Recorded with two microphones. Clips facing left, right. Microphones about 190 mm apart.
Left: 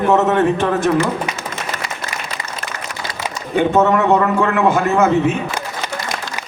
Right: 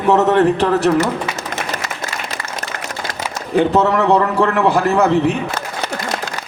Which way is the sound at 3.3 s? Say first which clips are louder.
Even; 35° right (ahead or behind).